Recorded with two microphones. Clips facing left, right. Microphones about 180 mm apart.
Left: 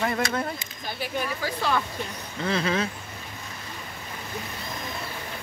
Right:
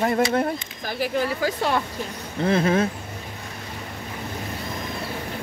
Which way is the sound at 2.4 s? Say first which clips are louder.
Right 6 dB; 50° right (ahead or behind).